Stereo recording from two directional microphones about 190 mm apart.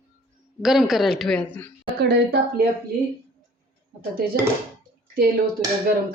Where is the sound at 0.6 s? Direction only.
Centre (ahead or behind).